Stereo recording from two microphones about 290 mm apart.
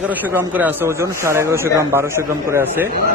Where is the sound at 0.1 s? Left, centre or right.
Centre.